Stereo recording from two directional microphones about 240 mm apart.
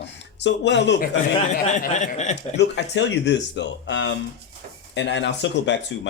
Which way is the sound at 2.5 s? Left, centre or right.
Left.